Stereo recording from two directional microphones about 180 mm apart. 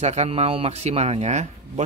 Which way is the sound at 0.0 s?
40° right (ahead or behind).